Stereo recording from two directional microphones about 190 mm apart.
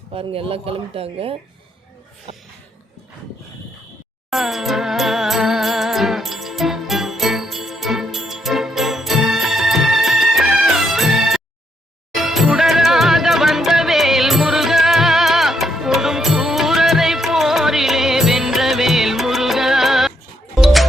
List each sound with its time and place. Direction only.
0.1 s speech: 30° right (ahead or behind)
4.3 s music: centre (ahead or behind)